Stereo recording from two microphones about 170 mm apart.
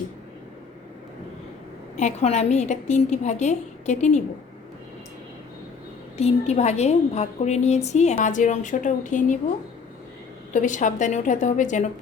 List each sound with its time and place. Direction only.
2.0 s a woman's voice: 40° left (ahead or behind)
6.1 s a woman's voice: 40° left (ahead or behind)
10.5 s a woman's voice: 45° left (ahead or behind)